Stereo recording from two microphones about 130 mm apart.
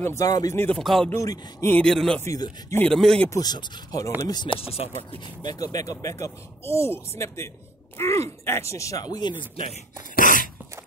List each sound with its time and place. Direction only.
0.0 s speech: 25° left (ahead or behind)
0.6 s speech: 10° left (ahead or behind)
0.8 s speech: centre (ahead or behind)
1.1 s speech: 25° left (ahead or behind)
1.7 s speech: 5° left (ahead or behind)
2.2 s speech: 25° left (ahead or behind)
2.8 s speech: 5° left (ahead or behind)
3.3 s speech: 30° left (ahead or behind)
4.5 s speech: 10° left (ahead or behind)
5.5 s speech: 30° left (ahead or behind)
10.1 s a sound: 90° left